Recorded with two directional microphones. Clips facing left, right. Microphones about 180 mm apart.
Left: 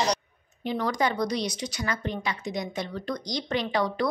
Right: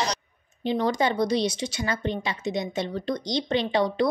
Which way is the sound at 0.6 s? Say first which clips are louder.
Right 3 dB; 25° right (ahead or behind).